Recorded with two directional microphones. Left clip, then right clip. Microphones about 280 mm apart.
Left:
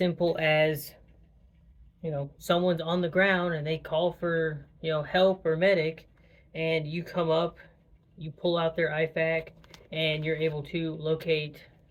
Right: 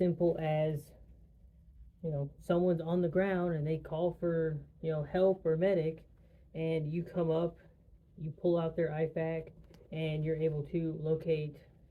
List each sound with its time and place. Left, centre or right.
0.3 s speech: centre
2.0 s a woman's voice: centre
2.4 s speech: centre